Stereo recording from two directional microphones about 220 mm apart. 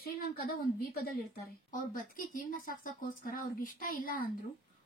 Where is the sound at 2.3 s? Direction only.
40° left (ahead or behind).